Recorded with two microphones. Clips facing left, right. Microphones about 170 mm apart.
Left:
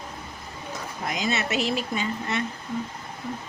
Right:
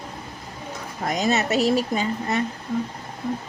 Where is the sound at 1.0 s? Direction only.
40° right (ahead or behind).